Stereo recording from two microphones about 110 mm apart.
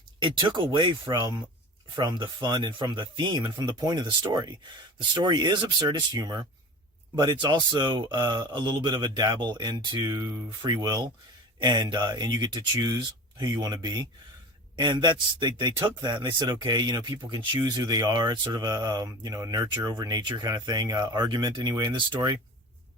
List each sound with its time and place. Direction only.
0.2 s speech: 45° right (ahead or behind)